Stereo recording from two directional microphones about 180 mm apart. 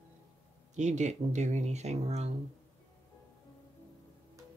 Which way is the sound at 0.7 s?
40° right (ahead or behind).